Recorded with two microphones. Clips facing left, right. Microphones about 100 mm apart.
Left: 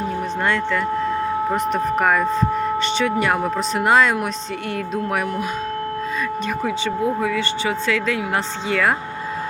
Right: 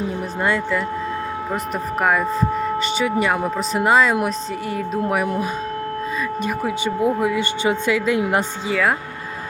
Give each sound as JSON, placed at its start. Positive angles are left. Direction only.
{"t": 0.4, "sound": "speech", "side_deg": -10}
{"t": 6.4, "sound": "speech", "side_deg": -10}